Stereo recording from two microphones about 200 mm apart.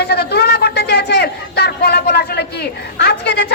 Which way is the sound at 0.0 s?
55° left (ahead or behind).